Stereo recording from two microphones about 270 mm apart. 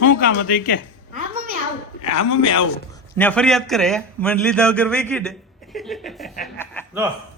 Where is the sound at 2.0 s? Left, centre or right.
Left.